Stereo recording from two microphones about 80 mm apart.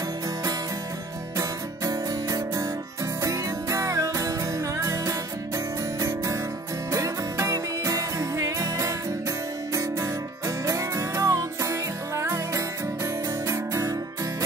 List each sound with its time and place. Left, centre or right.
1.9 s music: right